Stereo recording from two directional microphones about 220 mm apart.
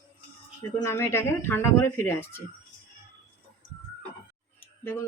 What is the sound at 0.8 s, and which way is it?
Speech, 10° left (ahead or behind).